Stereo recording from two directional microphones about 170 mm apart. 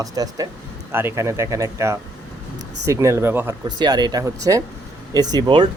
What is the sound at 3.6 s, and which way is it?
Speech, 25° right (ahead or behind).